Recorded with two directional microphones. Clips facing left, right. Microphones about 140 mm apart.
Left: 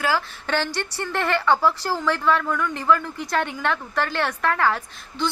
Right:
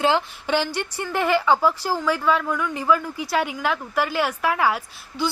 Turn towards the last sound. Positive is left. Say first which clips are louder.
# right 1 dB
turn(degrees=-5)  # may be behind; listen again after turning